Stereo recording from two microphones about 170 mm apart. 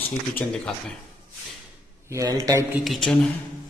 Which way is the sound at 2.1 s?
20° right (ahead or behind).